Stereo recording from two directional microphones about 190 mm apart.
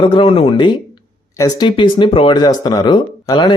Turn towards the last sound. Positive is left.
turn(degrees=25)  # may be behind; listen again after turning